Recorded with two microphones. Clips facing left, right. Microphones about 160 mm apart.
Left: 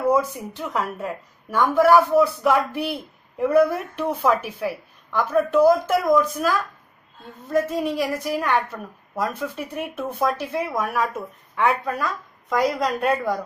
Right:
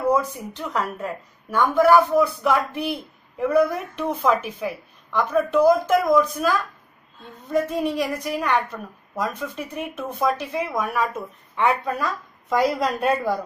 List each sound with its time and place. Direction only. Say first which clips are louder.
0.1 s a woman's voice: left 1 dB; 5° left (ahead or behind)